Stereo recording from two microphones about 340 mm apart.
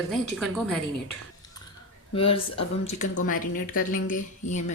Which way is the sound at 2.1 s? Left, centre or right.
Centre.